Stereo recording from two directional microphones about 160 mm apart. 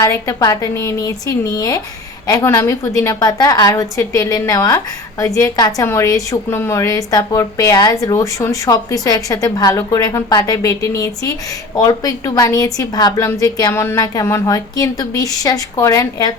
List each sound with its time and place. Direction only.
0.0 s a woman's voice: 20° left (ahead or behind)